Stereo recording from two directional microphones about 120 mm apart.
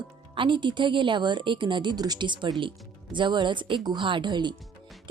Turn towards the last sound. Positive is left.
turn(degrees=-40)  # may be behind; listen again after turning